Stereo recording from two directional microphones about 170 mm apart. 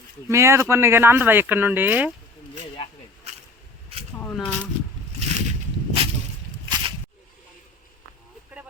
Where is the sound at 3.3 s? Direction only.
40° right (ahead or behind).